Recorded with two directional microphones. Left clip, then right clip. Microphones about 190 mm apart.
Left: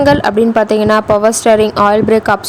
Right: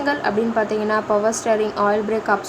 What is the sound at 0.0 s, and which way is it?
A woman's voice, 45° left (ahead or behind).